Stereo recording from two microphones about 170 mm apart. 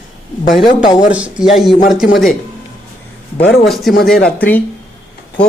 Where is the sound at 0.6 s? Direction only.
25° left (ahead or behind).